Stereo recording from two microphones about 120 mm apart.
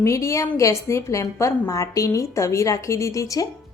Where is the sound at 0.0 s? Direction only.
25° left (ahead or behind).